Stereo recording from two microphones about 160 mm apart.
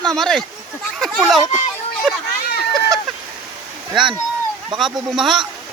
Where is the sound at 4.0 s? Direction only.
Centre (ahead or behind).